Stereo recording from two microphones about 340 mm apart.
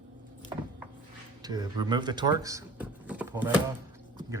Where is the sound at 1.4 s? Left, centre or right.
Centre.